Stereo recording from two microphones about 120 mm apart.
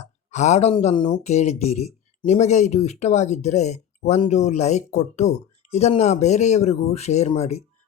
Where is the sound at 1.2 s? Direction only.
65° left (ahead or behind).